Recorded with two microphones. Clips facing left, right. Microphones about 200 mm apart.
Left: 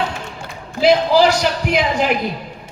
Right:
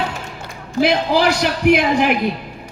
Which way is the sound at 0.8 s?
60° right (ahead or behind).